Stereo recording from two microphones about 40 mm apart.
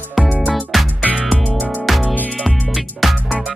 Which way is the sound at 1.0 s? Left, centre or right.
Right.